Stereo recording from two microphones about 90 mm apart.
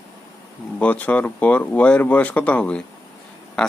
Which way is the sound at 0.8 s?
15° left (ahead or behind).